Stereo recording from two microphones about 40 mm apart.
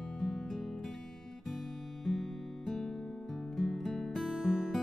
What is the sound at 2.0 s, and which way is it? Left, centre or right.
Music, centre.